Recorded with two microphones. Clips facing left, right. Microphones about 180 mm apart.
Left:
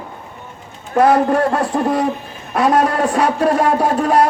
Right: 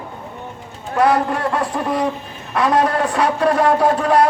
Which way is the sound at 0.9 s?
45° left (ahead or behind).